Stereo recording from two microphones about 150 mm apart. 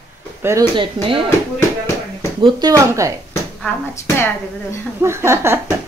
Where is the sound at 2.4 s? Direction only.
25° right (ahead or behind).